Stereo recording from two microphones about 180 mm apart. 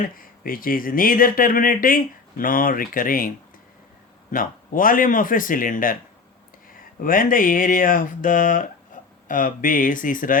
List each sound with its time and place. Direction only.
0.2 s speech: 50° left (ahead or behind)